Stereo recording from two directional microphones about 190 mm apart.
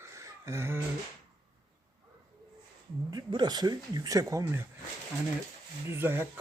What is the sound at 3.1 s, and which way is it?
Speech, 20° right (ahead or behind).